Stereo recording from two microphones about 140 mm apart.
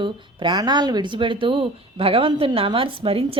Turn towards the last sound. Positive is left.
turn(degrees=-45)  # may be behind; listen again after turning